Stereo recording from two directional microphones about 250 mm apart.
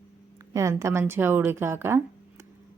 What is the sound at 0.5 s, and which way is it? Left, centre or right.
A woman's voice, centre.